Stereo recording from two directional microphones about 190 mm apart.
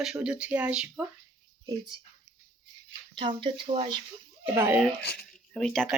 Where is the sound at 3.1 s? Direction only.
25° right (ahead or behind).